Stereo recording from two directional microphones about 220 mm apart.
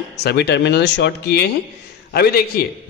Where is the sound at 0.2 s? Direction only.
50° left (ahead or behind).